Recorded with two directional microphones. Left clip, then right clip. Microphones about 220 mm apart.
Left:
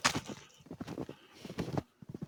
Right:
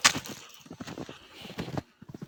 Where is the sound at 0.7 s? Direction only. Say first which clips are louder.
Right 2 dB; 50° right (ahead or behind).